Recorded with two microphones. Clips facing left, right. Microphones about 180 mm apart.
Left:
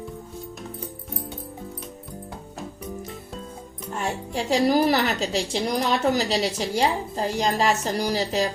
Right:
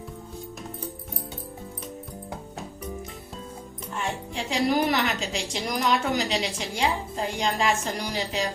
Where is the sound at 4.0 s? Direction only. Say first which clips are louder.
Left 3 dB; 40° left (ahead or behind).